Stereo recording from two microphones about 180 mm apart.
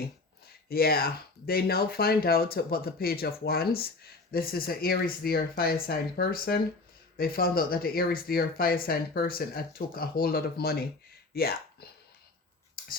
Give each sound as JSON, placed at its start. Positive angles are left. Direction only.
{"t": 0.7, "sound": "speech", "side_deg": 55}